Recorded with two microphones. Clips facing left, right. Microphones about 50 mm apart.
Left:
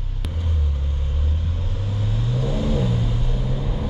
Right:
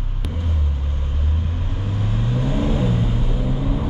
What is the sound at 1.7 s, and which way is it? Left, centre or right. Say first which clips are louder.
Vehicle: right 2 dB; right.